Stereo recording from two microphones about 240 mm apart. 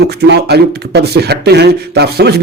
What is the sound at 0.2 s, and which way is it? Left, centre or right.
Speech, right.